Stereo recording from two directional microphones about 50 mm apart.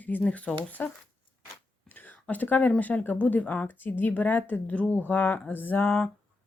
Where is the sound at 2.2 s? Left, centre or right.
Left.